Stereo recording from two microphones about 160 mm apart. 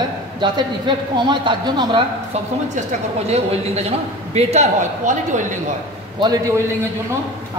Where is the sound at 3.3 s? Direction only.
40° right (ahead or behind).